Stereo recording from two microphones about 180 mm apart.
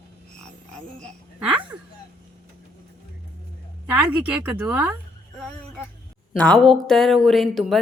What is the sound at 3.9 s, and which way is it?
Speech, 10° right (ahead or behind).